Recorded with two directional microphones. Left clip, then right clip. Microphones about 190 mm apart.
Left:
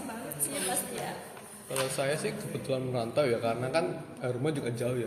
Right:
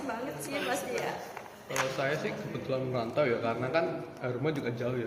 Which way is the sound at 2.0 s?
45° left (ahead or behind).